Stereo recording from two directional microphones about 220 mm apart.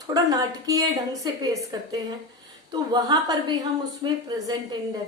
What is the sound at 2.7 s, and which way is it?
A woman's voice, 20° right (ahead or behind).